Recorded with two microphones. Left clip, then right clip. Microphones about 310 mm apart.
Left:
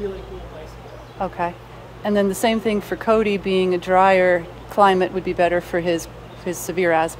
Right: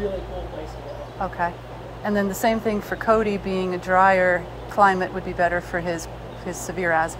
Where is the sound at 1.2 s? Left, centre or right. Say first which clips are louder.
Left 2 dB; centre.